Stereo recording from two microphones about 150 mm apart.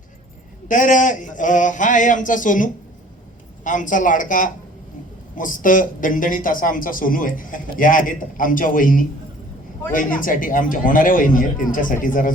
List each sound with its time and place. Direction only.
0.7 s speech: 55° left (ahead or behind)